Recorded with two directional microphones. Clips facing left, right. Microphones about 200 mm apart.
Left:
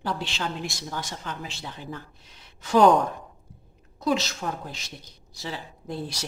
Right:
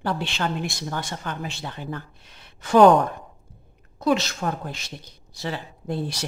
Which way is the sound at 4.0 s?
60° right (ahead or behind).